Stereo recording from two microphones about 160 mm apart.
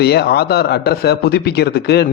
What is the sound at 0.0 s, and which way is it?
A man's voice, 90° left.